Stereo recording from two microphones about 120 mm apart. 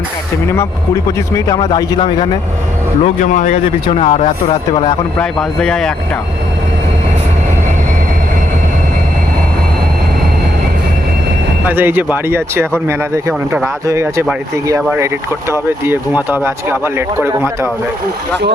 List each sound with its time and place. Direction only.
1.7 s a man's voice: 40° left (ahead or behind)
3.0 s speech: 90° left
3.8 s speech: 50° left (ahead or behind)
5.1 s speech: 5° left (ahead or behind)
11.7 s speech: 15° right (ahead or behind)